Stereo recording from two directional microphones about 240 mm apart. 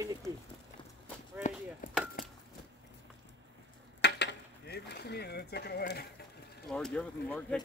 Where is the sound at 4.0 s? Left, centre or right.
Left.